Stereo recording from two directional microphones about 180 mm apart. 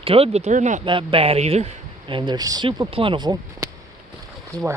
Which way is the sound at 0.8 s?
30° right (ahead or behind).